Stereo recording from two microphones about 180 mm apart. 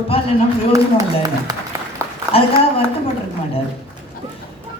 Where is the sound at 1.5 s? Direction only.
20° right (ahead or behind).